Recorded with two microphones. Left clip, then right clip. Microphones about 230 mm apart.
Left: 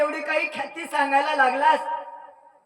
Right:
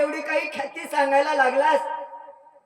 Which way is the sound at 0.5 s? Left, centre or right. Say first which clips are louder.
Right 1 dB; centre.